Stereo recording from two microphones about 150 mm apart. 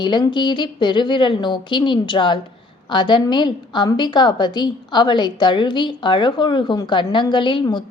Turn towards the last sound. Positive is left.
turn(degrees=30)  # may be behind; listen again after turning